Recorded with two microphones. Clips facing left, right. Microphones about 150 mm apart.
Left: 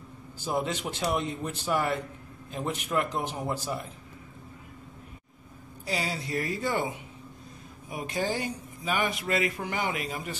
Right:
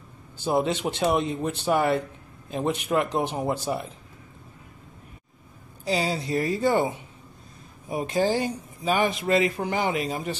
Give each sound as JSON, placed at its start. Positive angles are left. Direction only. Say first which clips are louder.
{"t": 0.4, "sound": "speech", "louder": "right 6 dB", "side_deg": -25}
{"t": 5.9, "sound": "speech", "louder": "right 6 dB", "side_deg": -25}